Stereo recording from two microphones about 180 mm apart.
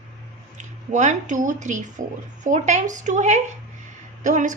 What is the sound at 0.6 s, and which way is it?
A woman's voice, 40° right (ahead or behind).